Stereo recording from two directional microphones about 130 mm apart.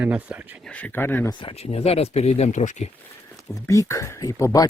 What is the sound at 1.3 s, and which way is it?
Speech, 40° left (ahead or behind).